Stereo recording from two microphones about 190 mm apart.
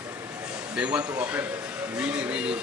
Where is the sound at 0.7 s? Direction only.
5° right (ahead or behind).